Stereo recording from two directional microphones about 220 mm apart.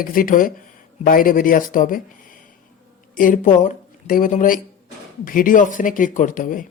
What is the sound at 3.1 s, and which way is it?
Speech, 35° left (ahead or behind).